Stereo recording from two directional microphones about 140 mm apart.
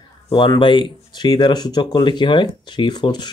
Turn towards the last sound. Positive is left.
turn(degrees=30)  # may be behind; listen again after turning